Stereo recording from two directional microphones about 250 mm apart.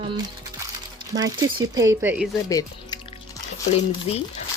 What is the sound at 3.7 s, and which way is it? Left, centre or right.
Speech, left.